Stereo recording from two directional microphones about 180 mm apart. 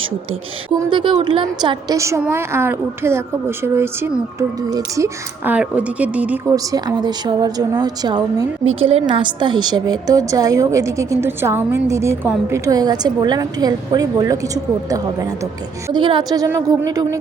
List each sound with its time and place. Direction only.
0.7 s a woman's voice: 25° right (ahead or behind); by 6.4 s 10° right (ahead or behind)
6.5 s a woman's voice: 20° right (ahead or behind)